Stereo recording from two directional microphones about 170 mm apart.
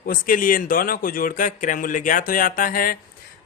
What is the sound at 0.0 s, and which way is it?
Speech, 55° left (ahead or behind).